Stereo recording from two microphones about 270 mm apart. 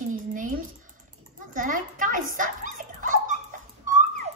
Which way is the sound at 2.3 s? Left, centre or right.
Right.